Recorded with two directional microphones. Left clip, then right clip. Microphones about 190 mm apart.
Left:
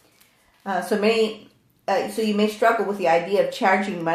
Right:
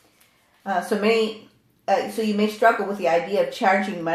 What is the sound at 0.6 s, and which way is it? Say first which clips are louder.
Speech: even; 15° left (ahead or behind).